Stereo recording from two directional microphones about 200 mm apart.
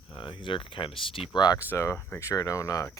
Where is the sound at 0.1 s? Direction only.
25° left (ahead or behind).